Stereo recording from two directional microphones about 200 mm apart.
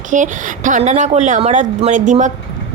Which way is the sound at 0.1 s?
40° right (ahead or behind).